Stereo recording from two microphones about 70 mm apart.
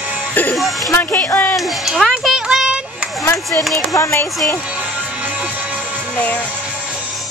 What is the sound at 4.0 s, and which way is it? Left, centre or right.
Speech, left.